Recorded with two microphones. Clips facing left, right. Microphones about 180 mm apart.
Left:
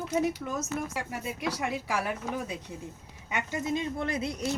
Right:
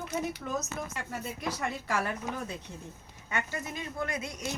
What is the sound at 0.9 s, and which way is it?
A woman's voice, 10° left (ahead or behind).